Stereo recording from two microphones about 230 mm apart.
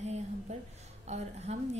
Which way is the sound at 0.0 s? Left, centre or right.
Right.